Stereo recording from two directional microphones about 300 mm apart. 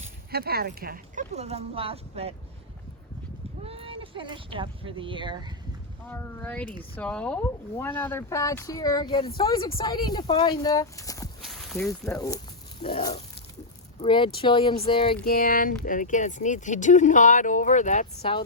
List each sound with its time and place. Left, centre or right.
0.0 s speech: right
3.6 s speech: centre
6.1 s speech: centre
11.4 s speech: centre
15.1 s speech: left